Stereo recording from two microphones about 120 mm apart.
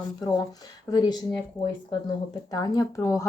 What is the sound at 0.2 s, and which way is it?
Speech, 35° left (ahead or behind).